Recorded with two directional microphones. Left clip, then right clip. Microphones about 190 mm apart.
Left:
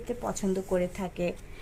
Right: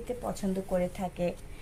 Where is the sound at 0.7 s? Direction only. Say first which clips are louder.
Left 1 dB; 50° left (ahead or behind).